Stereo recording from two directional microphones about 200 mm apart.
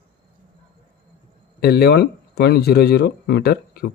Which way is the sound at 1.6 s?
50° left (ahead or behind).